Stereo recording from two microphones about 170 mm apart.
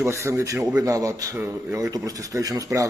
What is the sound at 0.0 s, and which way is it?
Speech, 15° right (ahead or behind).